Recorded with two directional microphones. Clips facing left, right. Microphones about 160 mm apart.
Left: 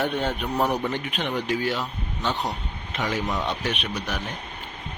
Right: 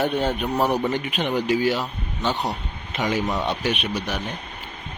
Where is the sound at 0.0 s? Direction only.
5° right (ahead or behind).